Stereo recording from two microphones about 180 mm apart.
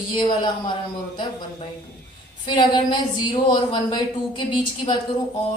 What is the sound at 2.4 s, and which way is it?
A woman's voice, 25° left (ahead or behind).